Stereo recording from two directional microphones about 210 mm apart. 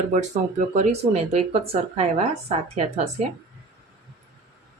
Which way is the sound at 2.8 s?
30° right (ahead or behind).